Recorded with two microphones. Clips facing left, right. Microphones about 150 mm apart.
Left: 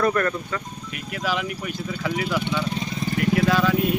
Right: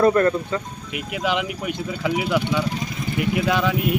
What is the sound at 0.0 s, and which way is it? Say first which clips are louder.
Speech: right 5 dB; 25° right (ahead or behind).